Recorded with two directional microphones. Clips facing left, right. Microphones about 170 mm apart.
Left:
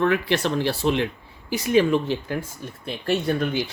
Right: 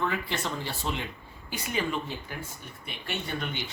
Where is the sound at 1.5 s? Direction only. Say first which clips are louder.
Left 12 dB; 90° left.